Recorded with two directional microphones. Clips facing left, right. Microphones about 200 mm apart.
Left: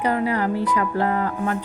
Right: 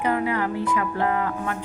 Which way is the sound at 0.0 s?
35° left (ahead or behind).